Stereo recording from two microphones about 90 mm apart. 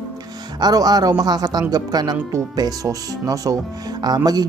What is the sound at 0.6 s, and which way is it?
Speech, 50° right (ahead or behind).